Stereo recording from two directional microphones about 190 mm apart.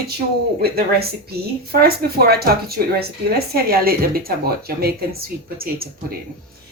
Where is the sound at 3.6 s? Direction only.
50° right (ahead or behind).